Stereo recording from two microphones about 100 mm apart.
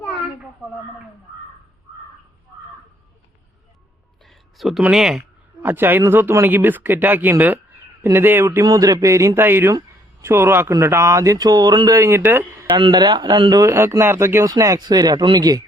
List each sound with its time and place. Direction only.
4.3 s a sound: centre (ahead or behind)
4.8 s speech: 5° right (ahead or behind)
5.6 s speech: 20° right (ahead or behind)
8.6 s speech: 40° right (ahead or behind)
11.9 s speech: 25° right (ahead or behind)
12.7 s speech: 45° right (ahead or behind); by 14.5 s 25° right (ahead or behind)
14.5 s speech: 40° right (ahead or behind)